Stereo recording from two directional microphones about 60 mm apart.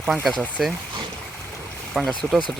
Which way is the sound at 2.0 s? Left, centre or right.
Centre.